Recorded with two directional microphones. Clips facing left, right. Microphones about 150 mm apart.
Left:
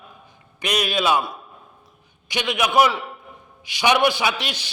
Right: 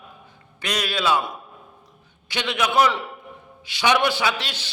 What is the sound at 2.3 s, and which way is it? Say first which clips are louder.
A man's voice: left 2 dB; 15° left (ahead or behind).